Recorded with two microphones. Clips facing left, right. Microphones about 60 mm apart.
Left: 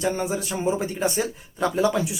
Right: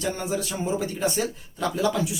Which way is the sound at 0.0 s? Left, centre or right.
Left.